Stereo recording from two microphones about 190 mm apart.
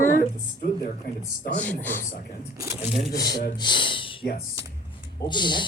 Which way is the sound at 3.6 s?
25° left (ahead or behind).